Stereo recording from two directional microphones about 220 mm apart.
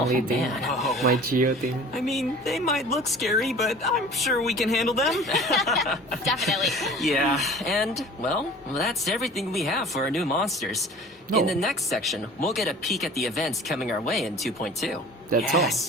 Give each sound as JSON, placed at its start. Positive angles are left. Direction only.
{"t": 0.0, "sound": "speech", "side_deg": 0}
{"t": 1.0, "sound": "speech", "side_deg": -40}
{"t": 2.0, "sound": "speech", "side_deg": 0}